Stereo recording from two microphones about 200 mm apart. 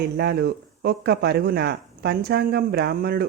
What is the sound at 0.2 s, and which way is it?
Speech, 55° right (ahead or behind).